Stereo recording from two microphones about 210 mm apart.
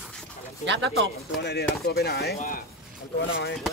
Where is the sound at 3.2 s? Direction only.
60° left (ahead or behind).